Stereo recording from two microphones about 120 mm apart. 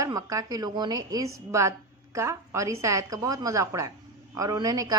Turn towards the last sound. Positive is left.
turn(degrees=-30)  # may be behind; listen again after turning